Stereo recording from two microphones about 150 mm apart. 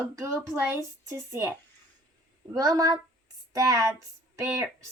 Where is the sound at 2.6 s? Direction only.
25° right (ahead or behind).